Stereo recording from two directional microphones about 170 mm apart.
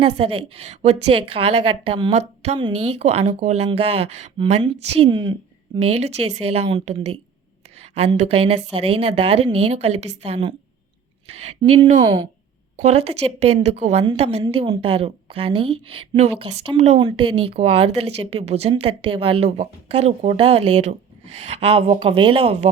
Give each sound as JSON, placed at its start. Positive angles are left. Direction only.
{"t": 0.0, "sound": "a woman's voice", "side_deg": -30}
{"t": 11.7, "sound": "a woman's voice", "side_deg": -40}
{"t": 12.0, "sound": "speech", "side_deg": -25}
{"t": 12.8, "sound": "a woman's voice", "side_deg": -40}
{"t": 17.0, "sound": "a woman's voice", "side_deg": -25}